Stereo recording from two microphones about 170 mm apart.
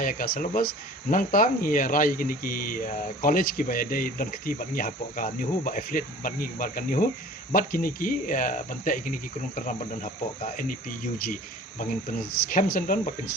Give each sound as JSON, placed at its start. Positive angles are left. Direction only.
{"t": 0.0, "sound": "speech", "side_deg": 55}